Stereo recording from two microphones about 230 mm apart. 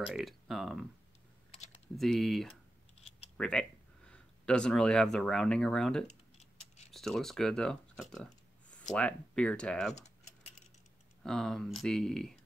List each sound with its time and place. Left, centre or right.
0.0 s speech: centre
2.0 s speech: centre
6.0 s keys jangling: left
6.9 s a sound: centre
8.9 s speech: centre
9.9 s keys jangling: left
11.2 s speech: centre